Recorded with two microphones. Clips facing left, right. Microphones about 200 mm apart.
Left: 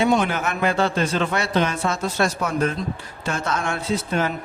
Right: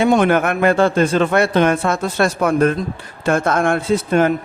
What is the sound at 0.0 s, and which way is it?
Speech, 55° right (ahead or behind).